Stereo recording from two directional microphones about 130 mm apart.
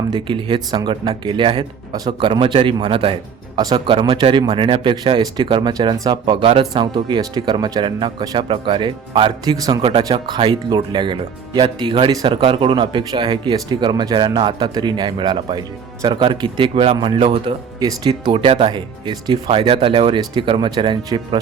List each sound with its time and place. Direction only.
0.1 s speech: 40° right (ahead or behind)
17.7 s speech: 30° right (ahead or behind)